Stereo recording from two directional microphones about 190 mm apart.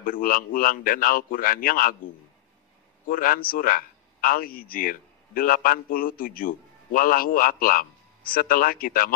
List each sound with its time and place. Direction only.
0.0 s speech: 45° left (ahead or behind)
3.1 s speech: 45° left (ahead or behind)